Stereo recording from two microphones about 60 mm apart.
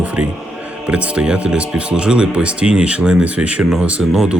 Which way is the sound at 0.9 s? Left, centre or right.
Centre.